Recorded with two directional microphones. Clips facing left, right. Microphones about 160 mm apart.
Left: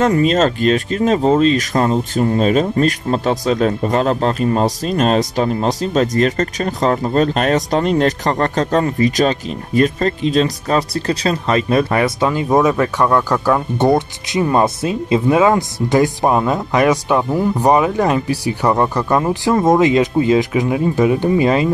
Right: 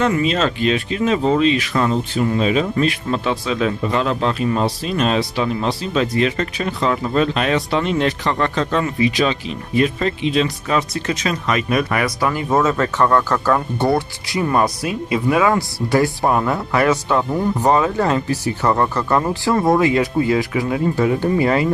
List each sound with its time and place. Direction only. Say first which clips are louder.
0.0 s speech: left 4 dB; 45° left (ahead or behind); by 21.6 s 20° left (ahead or behind)